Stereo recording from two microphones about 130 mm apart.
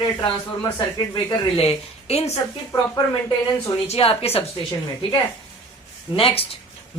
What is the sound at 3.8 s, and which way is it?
Speech, 50° left (ahead or behind).